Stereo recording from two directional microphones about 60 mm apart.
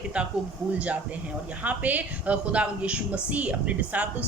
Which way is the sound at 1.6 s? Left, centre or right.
Right.